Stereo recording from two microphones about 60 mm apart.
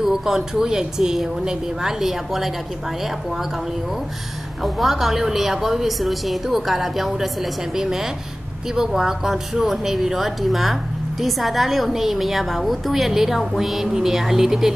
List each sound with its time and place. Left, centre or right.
0.0 s speech: centre
4.6 s speech: centre